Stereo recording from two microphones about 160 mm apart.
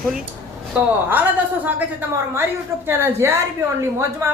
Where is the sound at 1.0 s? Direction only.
15° right (ahead or behind).